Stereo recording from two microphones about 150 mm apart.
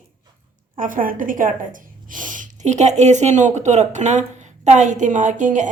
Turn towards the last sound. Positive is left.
turn(degrees=-55)  # may be behind; listen again after turning